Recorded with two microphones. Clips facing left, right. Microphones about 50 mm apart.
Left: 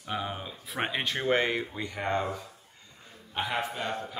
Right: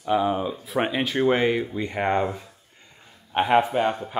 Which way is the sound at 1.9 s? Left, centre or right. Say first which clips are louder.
Right 7 dB; right.